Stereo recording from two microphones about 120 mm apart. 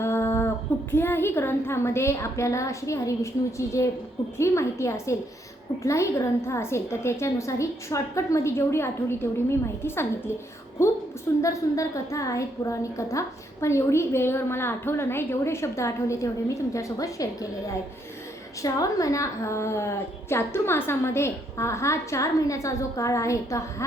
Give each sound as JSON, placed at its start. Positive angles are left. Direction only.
{"t": 0.0, "sound": "a woman's voice", "side_deg": 20}
{"t": 18.6, "sound": "a woman's voice", "side_deg": 30}